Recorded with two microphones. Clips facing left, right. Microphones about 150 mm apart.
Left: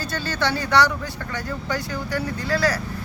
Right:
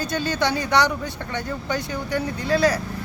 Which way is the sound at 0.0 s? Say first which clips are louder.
Right 2 dB; 15° right (ahead or behind).